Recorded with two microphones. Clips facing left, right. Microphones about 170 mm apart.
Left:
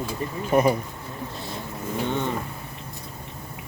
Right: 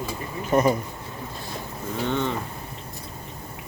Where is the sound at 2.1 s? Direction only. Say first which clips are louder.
Right 2 dB; 15° left (ahead or behind).